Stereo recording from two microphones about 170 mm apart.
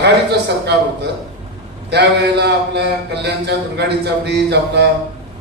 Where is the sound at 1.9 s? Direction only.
80° right.